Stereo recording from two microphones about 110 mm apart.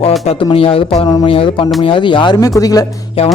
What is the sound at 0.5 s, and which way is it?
Speech, 60° left (ahead or behind).